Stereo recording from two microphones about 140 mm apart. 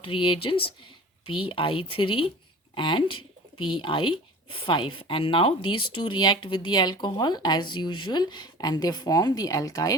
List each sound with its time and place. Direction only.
0.0 s speech: 35° left (ahead or behind)